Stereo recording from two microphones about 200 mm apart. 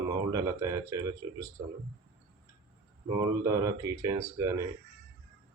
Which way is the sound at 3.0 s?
15° right (ahead or behind).